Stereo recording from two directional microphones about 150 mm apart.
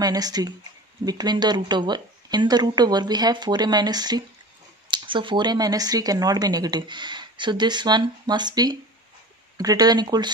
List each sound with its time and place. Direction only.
0.0 s speech: 25° right (ahead or behind)